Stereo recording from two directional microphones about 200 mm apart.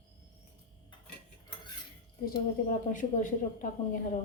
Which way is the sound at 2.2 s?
45° left (ahead or behind).